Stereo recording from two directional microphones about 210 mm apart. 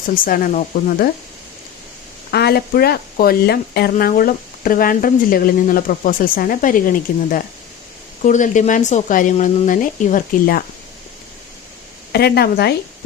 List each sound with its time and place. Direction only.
0.1 s speech: 40° left (ahead or behind)
2.3 s speech: 50° left (ahead or behind)
12.1 s speech: 50° left (ahead or behind)